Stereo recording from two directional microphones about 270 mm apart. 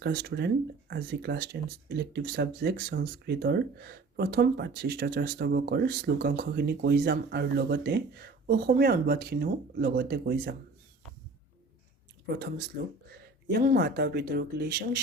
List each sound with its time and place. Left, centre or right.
0.0 s speech: right
12.2 s speech: right